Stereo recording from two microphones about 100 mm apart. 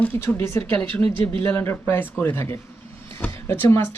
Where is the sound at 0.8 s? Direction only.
15° left (ahead or behind).